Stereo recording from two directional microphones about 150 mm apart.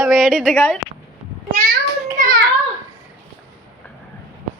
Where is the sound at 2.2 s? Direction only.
70° right (ahead or behind).